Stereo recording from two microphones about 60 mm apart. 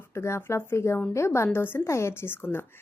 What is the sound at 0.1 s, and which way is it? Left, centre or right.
A woman's voice, left.